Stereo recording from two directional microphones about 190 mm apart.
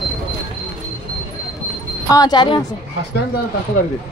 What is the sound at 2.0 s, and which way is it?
Speech, 20° left (ahead or behind).